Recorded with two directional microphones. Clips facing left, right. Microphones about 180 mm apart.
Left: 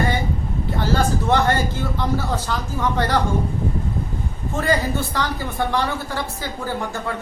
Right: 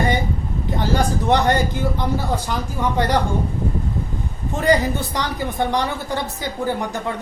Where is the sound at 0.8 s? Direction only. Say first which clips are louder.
Even; 15° right (ahead or behind).